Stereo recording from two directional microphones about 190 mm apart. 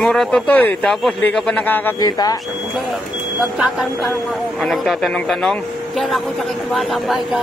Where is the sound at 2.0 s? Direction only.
20° left (ahead or behind).